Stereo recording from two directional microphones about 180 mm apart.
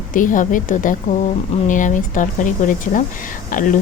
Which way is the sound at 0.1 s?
45° left (ahead or behind).